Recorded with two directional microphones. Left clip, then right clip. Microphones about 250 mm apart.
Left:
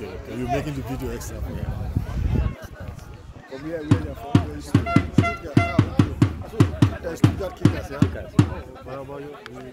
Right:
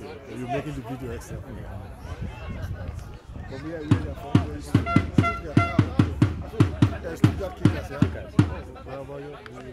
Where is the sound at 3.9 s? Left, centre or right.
Left.